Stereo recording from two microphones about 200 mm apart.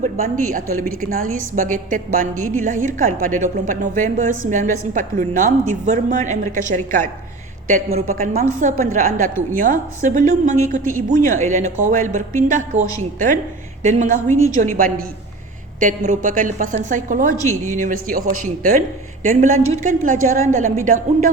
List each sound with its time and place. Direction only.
0.0 s a woman's voice: 40° right (ahead or behind)
8.2 s a woman's voice: 45° right (ahead or behind)
17.3 s speech: 15° left (ahead or behind)
17.7 s a woman's voice: 40° right (ahead or behind)